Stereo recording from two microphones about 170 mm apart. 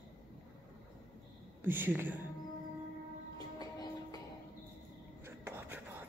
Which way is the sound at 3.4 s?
20° left (ahead or behind).